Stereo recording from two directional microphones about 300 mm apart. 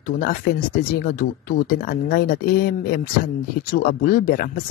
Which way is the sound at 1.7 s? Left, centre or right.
Left.